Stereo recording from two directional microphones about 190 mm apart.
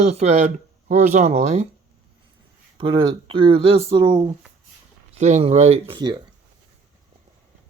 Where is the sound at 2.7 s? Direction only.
25° right (ahead or behind).